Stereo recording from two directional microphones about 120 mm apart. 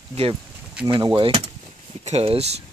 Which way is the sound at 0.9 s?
35° right (ahead or behind).